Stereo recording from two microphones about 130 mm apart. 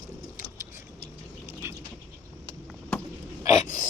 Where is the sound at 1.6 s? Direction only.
20° right (ahead or behind).